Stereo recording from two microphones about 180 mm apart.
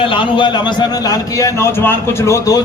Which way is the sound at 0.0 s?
30° left (ahead or behind).